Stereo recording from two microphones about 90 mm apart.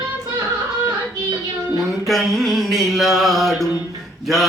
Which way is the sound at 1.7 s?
Centre (ahead or behind).